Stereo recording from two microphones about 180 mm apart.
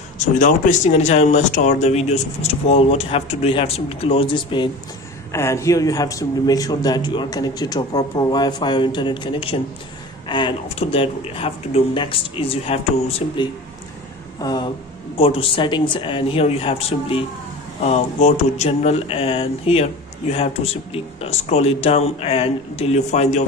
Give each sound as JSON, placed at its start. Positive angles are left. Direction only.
{"t": 0.2, "sound": "speech", "side_deg": 45}
{"t": 5.3, "sound": "a man's voice", "side_deg": 15}